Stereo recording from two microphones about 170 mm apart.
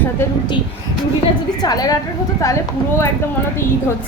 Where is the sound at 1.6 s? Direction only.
20° left (ahead or behind).